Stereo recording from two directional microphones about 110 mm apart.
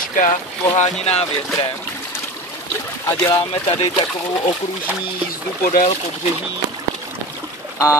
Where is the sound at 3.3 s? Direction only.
55° left (ahead or behind).